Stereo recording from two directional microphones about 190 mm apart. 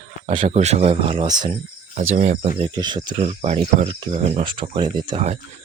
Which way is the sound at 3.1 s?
35° right (ahead or behind).